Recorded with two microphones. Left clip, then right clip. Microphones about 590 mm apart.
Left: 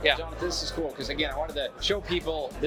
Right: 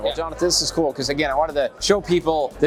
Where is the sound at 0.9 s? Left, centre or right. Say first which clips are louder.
Right 10 dB; right.